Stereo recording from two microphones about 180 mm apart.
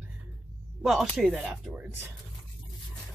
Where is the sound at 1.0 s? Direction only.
Centre (ahead or behind).